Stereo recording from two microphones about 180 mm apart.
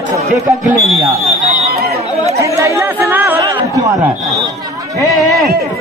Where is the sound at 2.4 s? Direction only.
15° right (ahead or behind).